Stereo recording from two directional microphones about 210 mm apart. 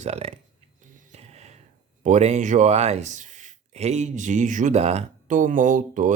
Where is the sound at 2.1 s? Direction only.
35° right (ahead or behind).